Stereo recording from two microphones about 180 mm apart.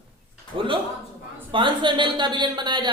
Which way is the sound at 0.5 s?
30° right (ahead or behind).